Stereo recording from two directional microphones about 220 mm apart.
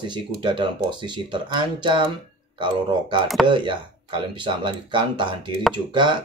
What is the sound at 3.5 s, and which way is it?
Speech, 20° right (ahead or behind).